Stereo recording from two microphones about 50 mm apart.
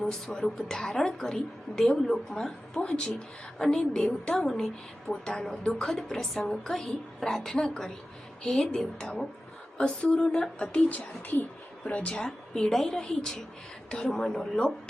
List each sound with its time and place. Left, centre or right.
0.0 s a woman's voice: centre
10.8 s speech: left
11.9 s a woman's voice: left